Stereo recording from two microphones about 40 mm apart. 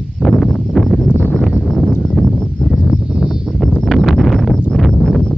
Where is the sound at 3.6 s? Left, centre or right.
Centre.